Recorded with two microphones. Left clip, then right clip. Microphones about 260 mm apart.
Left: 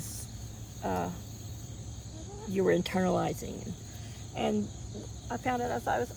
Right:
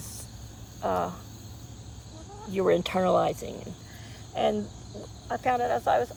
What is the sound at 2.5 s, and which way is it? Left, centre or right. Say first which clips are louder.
Speech: right 4 dB; right.